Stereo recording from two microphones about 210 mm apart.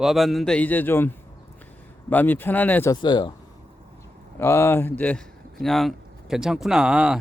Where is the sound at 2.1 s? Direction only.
10° left (ahead or behind).